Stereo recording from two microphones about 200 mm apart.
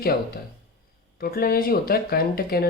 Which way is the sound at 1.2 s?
50° left (ahead or behind).